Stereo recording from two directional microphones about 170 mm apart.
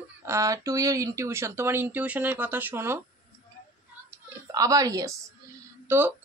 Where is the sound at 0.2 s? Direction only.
15° right (ahead or behind).